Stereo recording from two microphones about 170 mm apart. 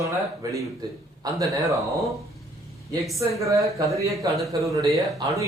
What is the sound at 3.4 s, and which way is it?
Speech, 20° right (ahead or behind).